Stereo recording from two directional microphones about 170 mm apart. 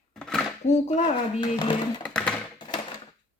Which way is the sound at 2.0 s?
5° left (ahead or behind).